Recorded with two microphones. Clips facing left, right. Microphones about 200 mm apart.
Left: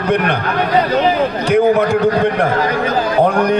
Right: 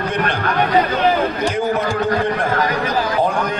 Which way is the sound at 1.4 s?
60° left (ahead or behind).